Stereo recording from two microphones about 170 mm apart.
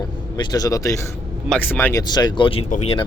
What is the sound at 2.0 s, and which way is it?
Speech, 25° left (ahead or behind).